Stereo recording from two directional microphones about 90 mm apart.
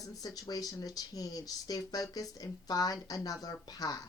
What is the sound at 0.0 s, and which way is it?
Speech, 40° left (ahead or behind).